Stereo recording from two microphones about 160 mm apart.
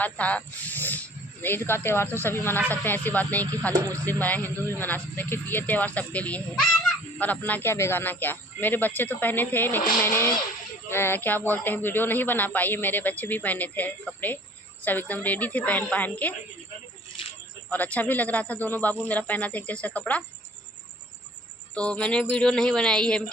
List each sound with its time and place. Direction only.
0.0 s speech: 10° left (ahead or behind)
3.7 s speech: 20° right (ahead or behind)
4.0 s speech: 10° left (ahead or behind)
17.2 s a sound: 35° left (ahead or behind)
17.7 s speech: 10° left (ahead or behind)
21.8 s speech: 5° left (ahead or behind)